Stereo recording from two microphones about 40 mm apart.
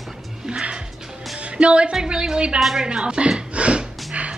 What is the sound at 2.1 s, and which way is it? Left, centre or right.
Speech, right.